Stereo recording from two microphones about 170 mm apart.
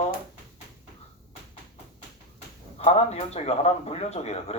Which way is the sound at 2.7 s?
40° left (ahead or behind).